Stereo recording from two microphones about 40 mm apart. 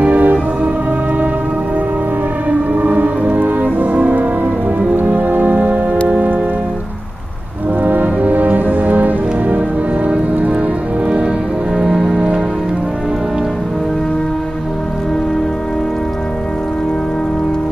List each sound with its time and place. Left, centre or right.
0.0 s music: right
2.8 s music: right
4.9 s music: right
7.8 s music: right
11.7 s music: centre